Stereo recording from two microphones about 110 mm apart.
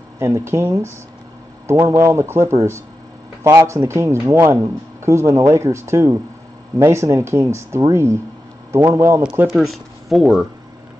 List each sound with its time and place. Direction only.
0.2 s speech: 25° right (ahead or behind)
9.2 s speech: 10° right (ahead or behind)